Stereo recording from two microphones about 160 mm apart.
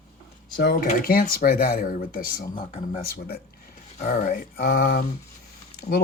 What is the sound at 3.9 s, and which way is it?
Speech, 55° left (ahead or behind).